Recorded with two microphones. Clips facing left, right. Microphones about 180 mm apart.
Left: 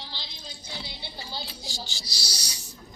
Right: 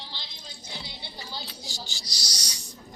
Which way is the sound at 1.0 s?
30° left (ahead or behind).